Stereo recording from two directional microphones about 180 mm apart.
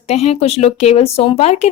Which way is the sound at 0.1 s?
35° left (ahead or behind).